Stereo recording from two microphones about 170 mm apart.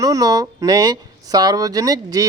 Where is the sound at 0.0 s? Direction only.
20° right (ahead or behind).